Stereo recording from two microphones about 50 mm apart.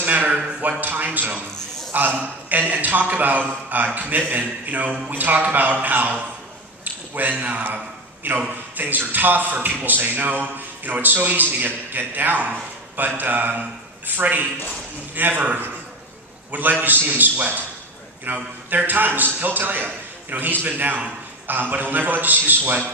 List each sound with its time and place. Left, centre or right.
0.0 s a sound: right
0.6 s a man's voice: right
16.8 s a man's voice: right